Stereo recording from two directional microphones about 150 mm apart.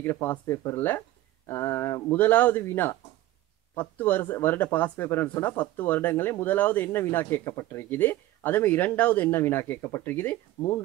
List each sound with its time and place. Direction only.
0.0 s speech: 15° left (ahead or behind)